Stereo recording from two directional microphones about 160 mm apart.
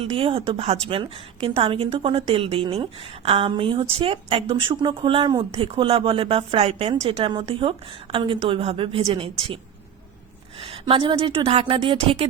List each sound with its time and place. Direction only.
0.0 s a woman's voice: 35° right (ahead or behind)
10.6 s a woman's voice: 35° right (ahead or behind)